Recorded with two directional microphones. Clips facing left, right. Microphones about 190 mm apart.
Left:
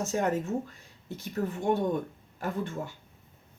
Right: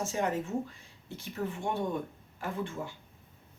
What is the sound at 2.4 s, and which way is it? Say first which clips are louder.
Speech: left 3 dB; 40° left (ahead or behind).